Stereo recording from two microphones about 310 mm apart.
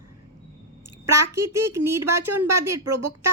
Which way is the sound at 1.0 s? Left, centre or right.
Right.